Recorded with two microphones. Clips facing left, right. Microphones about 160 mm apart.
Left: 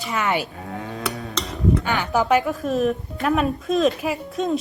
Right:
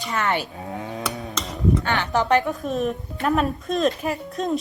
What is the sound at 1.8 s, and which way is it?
A woman's voice, 10° left (ahead or behind).